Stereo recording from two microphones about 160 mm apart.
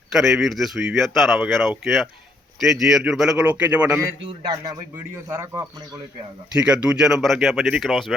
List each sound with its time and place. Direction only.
0.1 s a man's voice: 5° right (ahead or behind)
4.3 s a man's voice: 25° right (ahead or behind)
6.5 s a man's voice: 5° right (ahead or behind)